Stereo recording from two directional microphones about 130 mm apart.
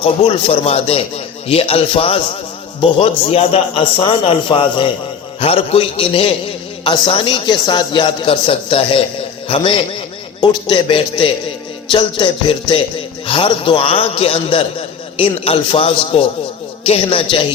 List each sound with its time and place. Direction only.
0.0 s a man's voice: 45° left (ahead or behind)